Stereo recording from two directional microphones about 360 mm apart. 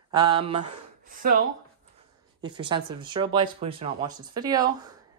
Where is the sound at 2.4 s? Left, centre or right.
Centre.